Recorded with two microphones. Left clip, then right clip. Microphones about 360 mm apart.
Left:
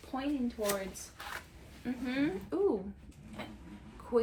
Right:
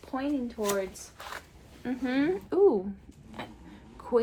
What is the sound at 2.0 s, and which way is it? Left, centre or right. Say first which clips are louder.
Speech: right 6 dB; right.